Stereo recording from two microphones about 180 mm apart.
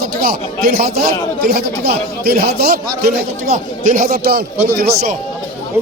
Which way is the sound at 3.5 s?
45° right (ahead or behind).